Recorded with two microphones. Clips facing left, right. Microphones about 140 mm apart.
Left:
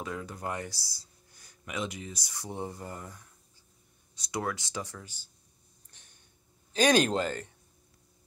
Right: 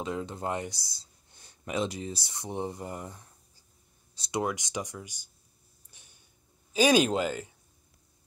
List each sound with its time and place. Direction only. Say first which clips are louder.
0.0 s speech: right 4 dB; 25° right (ahead or behind)
5.9 s a sound: right 1 dB; 10° right (ahead or behind)
6.7 s speech: right 1 dB; 5° right (ahead or behind)